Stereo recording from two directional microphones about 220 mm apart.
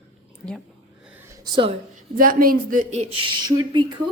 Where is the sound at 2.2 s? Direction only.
40° right (ahead or behind); by 3.9 s 20° right (ahead or behind).